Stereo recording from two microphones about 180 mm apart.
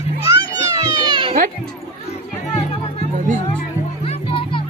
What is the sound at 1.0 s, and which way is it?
Cat, 25° right (ahead or behind).